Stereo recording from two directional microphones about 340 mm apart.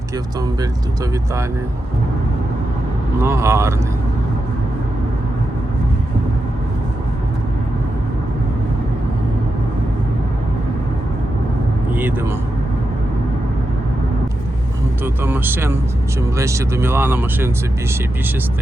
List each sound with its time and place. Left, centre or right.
3.2 s speech: centre
11.9 s a man's voice: centre
15.0 s speech: centre